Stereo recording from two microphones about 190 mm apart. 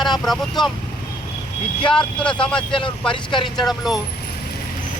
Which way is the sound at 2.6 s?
25° left (ahead or behind).